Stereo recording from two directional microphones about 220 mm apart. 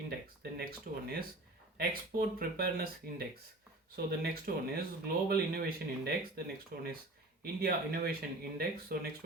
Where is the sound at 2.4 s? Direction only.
45° right (ahead or behind).